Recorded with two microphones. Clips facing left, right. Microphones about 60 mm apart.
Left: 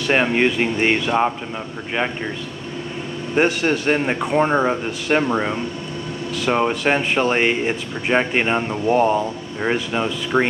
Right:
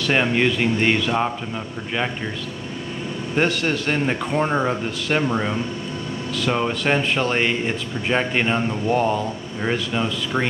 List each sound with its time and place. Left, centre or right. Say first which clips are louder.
0.0 s speech: left 2 dB; centre
3.3 s speech: left 3 dB; centre